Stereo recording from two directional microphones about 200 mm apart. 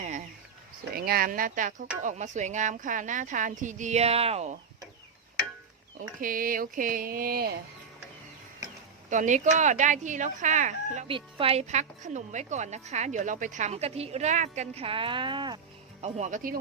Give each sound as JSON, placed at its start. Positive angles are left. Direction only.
{"t": 0.9, "sound": "speech", "side_deg": -50}
{"t": 6.1, "sound": "speech", "side_deg": -45}
{"t": 9.0, "sound": "speech", "side_deg": -40}